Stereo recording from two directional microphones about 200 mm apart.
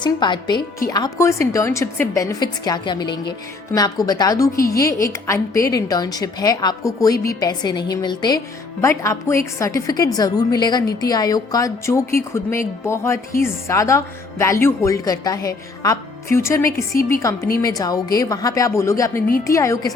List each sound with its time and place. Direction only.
0.0 s a woman's voice: 20° left (ahead or behind)